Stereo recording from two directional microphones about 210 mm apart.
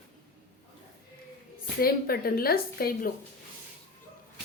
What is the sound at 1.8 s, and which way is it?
Speech, 45° left (ahead or behind).